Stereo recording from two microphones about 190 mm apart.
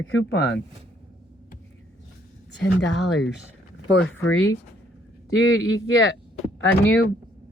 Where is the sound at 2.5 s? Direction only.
70° left (ahead or behind).